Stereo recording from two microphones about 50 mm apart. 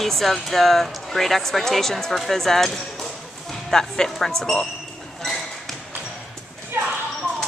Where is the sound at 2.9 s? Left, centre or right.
Centre.